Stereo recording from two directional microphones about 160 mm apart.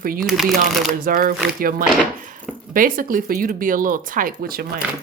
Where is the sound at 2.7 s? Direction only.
60° right (ahead or behind).